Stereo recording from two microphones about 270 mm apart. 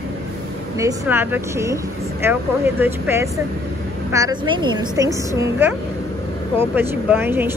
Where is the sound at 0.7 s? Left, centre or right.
Centre.